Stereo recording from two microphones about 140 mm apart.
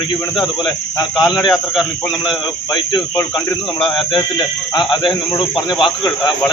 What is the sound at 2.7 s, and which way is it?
Speech, 35° left (ahead or behind).